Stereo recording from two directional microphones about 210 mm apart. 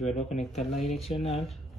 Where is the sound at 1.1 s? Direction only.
30° left (ahead or behind).